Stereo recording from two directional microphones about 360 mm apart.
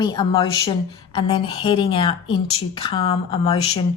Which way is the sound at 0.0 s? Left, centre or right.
Centre.